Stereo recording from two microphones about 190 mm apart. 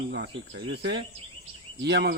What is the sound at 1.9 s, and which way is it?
Speech, 65° right (ahead or behind).